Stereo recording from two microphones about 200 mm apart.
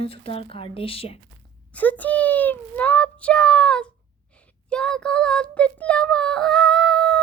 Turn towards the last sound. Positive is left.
turn(degrees=0)  # may be behind; listen again after turning